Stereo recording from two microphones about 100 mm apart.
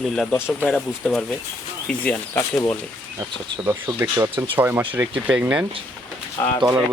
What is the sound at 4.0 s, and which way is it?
Speech, 20° right (ahead or behind).